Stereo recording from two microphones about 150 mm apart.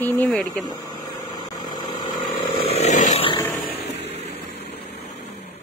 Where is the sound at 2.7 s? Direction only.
50° left (ahead or behind).